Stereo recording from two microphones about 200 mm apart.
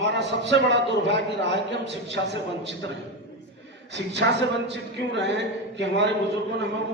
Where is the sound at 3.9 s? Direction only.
60° right (ahead or behind).